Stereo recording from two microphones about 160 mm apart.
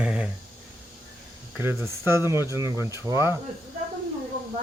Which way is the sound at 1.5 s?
15° right (ahead or behind).